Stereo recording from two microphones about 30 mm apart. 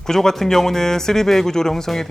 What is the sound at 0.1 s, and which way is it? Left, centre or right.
Speech, centre.